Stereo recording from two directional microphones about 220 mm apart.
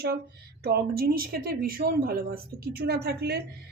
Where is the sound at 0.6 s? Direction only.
45° right (ahead or behind).